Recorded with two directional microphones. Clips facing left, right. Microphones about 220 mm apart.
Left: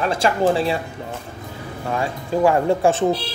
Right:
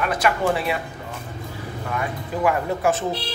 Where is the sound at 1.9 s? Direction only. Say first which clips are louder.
Left 5 dB; 25° left (ahead or behind).